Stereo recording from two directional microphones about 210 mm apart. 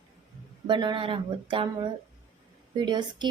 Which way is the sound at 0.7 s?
20° right (ahead or behind).